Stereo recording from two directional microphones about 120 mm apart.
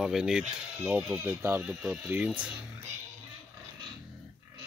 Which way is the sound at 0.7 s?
15° right (ahead or behind).